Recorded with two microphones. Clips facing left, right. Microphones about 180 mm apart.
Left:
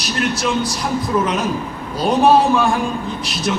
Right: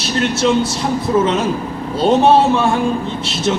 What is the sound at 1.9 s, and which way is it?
A man's voice, 25° right (ahead or behind).